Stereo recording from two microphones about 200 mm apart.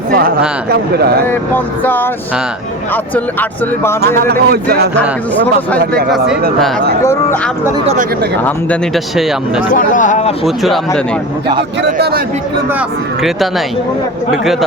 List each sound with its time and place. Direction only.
0.1 s speech: 50° right (ahead or behind)
1.2 s speech: 10° left (ahead or behind)
4.0 s speech: 50° right (ahead or behind)
6.1 s speech: centre (ahead or behind)
7.0 s speech: 15° left (ahead or behind)
8.4 s speech: 5° left (ahead or behind)
9.7 s speech: 40° left (ahead or behind)
10.4 s speech: centre (ahead or behind)
11.8 s speech: 55° right (ahead or behind)